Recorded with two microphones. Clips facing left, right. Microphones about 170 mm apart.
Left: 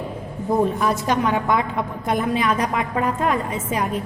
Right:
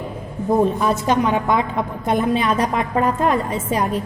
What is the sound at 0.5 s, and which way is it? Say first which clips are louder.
A woman's voice: right 2 dB; 20° right (ahead or behind).